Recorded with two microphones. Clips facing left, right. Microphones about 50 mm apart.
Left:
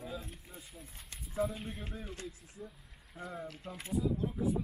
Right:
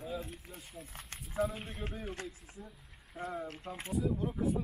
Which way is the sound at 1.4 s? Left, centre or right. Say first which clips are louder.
Even; centre.